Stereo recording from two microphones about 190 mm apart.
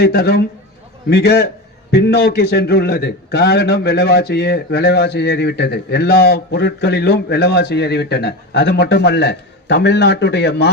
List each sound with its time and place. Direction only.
0.0 s a man's voice: 55° left (ahead or behind)